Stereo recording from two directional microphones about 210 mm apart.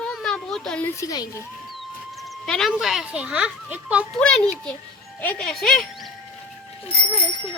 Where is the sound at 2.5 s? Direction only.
Centre (ahead or behind).